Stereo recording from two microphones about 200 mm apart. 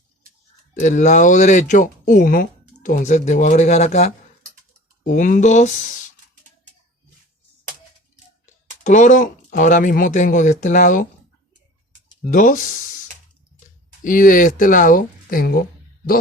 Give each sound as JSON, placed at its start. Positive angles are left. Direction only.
{"t": 0.7, "sound": "speech", "side_deg": 35}
{"t": 8.8, "sound": "speech", "side_deg": 40}
{"t": 12.3, "sound": "speech", "side_deg": 40}
{"t": 14.0, "sound": "speech", "side_deg": 40}